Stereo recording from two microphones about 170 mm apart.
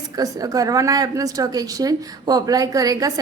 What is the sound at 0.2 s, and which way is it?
A woman's voice, 20° right (ahead or behind).